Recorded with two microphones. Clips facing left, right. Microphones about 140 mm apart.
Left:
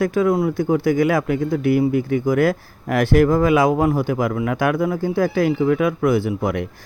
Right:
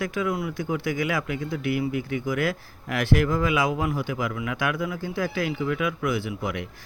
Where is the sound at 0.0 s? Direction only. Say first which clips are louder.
Left 9 dB; 40° left (ahead or behind).